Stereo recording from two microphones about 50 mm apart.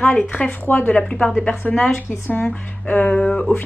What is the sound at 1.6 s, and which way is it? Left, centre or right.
Speech, left.